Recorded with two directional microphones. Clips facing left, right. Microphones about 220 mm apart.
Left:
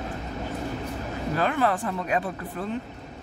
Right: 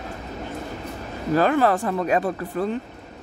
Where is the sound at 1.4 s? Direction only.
40° right (ahead or behind).